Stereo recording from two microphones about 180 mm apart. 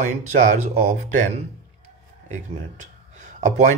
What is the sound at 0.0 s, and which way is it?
Speech, 45° right (ahead or behind).